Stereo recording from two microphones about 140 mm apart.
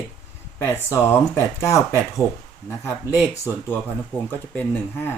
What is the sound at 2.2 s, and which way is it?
Speech, 10° right (ahead or behind).